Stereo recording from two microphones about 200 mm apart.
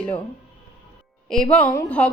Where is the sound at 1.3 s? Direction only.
5° left (ahead or behind).